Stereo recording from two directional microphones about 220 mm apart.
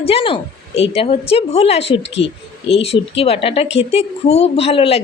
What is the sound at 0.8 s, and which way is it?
Speech, 25° left (ahead or behind).